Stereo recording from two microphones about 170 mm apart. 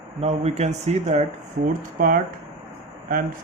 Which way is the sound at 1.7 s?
55° right (ahead or behind).